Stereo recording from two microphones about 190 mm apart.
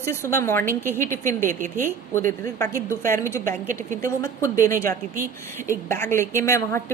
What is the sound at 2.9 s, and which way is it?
A woman's voice, 15° left (ahead or behind).